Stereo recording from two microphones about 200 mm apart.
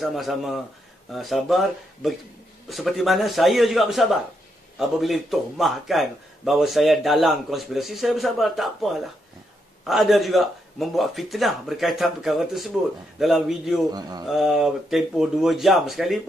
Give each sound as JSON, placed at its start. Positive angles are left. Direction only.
{"t": 0.0, "sound": "a man's voice", "side_deg": 0}
{"t": 13.8, "sound": "speech", "side_deg": -20}
{"t": 14.2, "sound": "a man's voice", "side_deg": 0}